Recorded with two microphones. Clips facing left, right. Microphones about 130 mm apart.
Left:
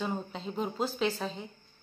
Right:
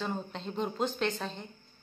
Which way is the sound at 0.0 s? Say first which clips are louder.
Left 1 dB; 5° left (ahead or behind).